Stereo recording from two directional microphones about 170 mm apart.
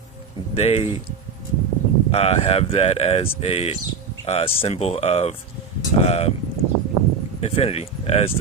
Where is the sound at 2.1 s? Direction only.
35° left (ahead or behind).